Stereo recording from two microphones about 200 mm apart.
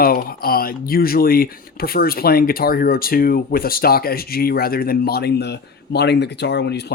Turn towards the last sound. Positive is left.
turn(degrees=60)  # may be behind; listen again after turning